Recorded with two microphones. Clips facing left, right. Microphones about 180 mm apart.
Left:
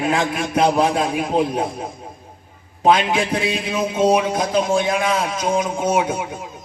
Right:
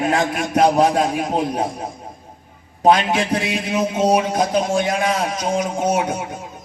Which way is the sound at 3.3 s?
40° right (ahead or behind).